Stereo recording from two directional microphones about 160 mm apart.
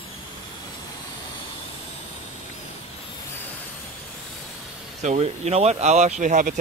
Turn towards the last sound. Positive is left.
turn(degrees=-55)  # may be behind; listen again after turning